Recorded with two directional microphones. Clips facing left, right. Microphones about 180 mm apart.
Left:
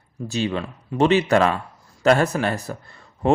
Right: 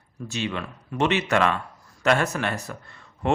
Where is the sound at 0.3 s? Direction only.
35° left (ahead or behind).